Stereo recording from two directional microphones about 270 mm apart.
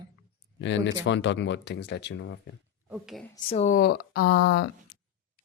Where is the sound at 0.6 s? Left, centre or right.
Left.